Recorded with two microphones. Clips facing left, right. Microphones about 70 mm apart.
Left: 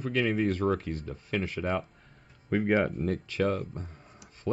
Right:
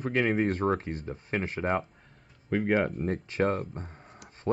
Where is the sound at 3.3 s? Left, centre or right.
Right.